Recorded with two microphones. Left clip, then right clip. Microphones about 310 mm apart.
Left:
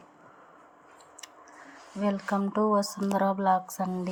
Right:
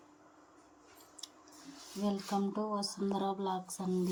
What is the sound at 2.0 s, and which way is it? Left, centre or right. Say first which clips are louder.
A woman's voice: left 7 dB; left.